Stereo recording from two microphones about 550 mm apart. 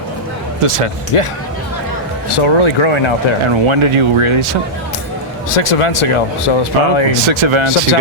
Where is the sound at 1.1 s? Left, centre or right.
Left.